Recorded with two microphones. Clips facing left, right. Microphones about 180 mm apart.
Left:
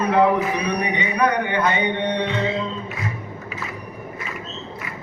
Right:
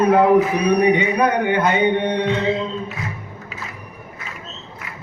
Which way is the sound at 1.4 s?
50° right (ahead or behind).